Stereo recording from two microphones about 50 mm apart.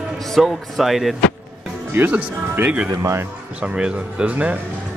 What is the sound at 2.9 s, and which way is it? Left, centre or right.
Speech, right.